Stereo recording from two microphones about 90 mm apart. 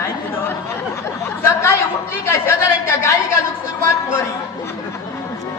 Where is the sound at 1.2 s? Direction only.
30° left (ahead or behind).